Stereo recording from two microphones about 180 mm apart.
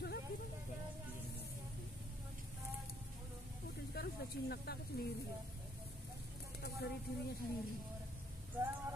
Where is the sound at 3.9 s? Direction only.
60° left (ahead or behind).